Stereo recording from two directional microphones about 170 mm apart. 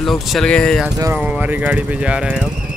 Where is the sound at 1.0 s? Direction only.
10° right (ahead or behind).